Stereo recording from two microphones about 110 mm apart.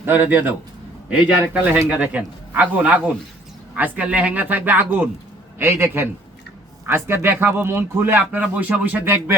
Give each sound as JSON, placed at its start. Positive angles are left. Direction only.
{"t": 0.0, "sound": "speech", "side_deg": -20}
{"t": 1.5, "sound": "speech", "side_deg": -15}